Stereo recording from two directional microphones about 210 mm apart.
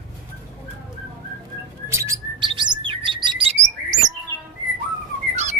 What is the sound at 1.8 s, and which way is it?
Bird, 15° right (ahead or behind).